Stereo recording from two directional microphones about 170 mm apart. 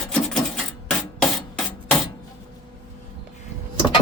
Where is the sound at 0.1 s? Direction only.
5° left (ahead or behind).